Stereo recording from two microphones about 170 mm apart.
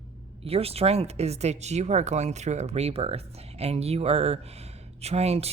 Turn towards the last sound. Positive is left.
turn(degrees=-35)  # may be behind; listen again after turning